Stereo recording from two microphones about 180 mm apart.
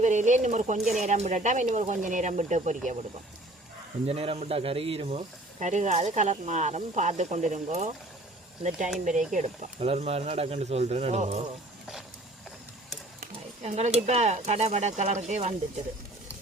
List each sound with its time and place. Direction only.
0.0 s speech: 40° right (ahead or behind)
4.0 s speech: 35° right (ahead or behind)
9.0 s speech: 45° right (ahead or behind)
13.1 s a sound: 40° right (ahead or behind)
14.1 s speech: 40° right (ahead or behind)